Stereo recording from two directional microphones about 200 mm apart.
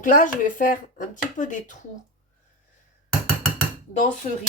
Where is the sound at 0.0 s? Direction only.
40° left (ahead or behind).